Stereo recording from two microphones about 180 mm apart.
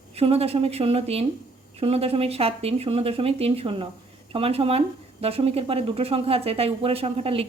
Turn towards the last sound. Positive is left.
turn(degrees=-35)  # may be behind; listen again after turning